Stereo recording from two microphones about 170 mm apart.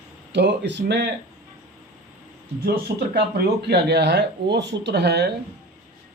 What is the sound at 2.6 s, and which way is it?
Speech, 65° right (ahead or behind).